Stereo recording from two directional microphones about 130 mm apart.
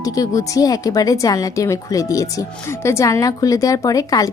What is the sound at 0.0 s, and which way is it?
Speech, 25° left (ahead or behind).